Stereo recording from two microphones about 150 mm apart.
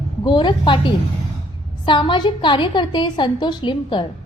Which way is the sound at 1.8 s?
30° left (ahead or behind).